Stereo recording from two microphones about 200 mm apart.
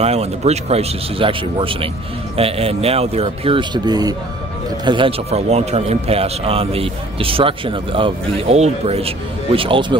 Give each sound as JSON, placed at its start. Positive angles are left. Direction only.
{"t": 0.0, "sound": "a man's voice", "side_deg": -30}